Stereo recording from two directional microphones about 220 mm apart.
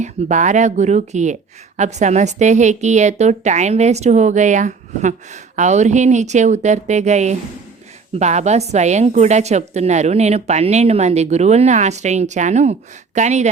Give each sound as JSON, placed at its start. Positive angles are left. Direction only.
{"t": 0.0, "sound": "speech", "side_deg": -35}